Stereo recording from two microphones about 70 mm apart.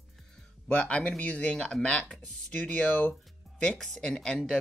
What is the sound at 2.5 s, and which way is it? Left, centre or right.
Speech, centre.